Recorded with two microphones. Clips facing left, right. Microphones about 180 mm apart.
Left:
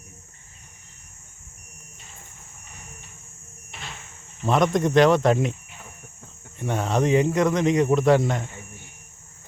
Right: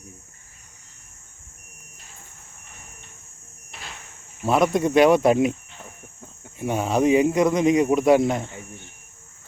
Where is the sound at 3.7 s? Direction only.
Centre (ahead or behind).